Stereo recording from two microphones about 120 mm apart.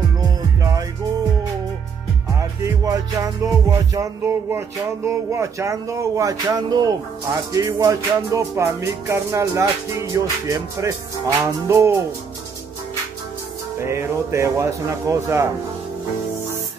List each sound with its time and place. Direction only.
2.3 s music: 25° right (ahead or behind)
13.7 s music: 25° right (ahead or behind)